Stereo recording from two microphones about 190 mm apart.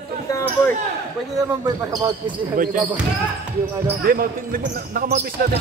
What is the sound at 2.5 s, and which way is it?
Speech, 45° right (ahead or behind).